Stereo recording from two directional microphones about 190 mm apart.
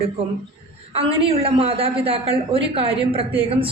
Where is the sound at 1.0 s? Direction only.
30° right (ahead or behind).